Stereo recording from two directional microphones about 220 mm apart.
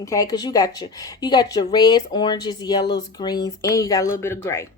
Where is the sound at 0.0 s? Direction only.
15° left (ahead or behind).